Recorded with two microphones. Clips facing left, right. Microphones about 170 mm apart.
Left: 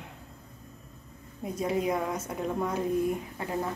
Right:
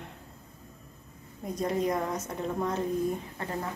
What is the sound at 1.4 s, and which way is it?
A woman's voice, 5° left (ahead or behind).